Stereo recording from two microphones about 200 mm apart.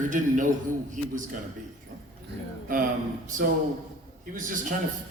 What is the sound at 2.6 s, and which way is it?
A man's voice, 45° right (ahead or behind).